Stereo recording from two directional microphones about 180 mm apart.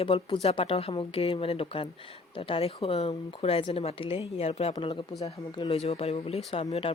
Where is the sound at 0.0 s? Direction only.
30° left (ahead or behind).